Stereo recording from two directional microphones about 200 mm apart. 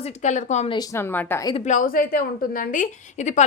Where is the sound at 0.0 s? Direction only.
35° left (ahead or behind).